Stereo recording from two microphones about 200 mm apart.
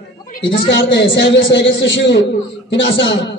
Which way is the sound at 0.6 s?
60° left (ahead or behind).